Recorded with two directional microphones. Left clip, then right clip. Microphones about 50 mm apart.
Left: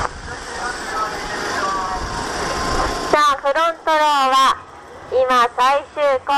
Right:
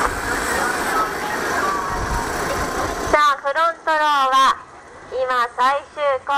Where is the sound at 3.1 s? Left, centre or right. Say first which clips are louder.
Left 1 dB; left.